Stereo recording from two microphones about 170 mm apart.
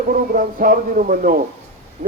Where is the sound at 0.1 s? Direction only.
55° right (ahead or behind).